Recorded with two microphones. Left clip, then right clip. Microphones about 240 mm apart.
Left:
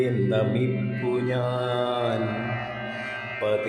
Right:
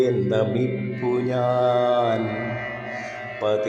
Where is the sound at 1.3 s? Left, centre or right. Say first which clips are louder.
Right 6 dB; centre.